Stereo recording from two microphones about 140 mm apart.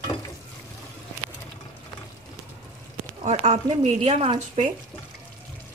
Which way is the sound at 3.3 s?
55° right (ahead or behind).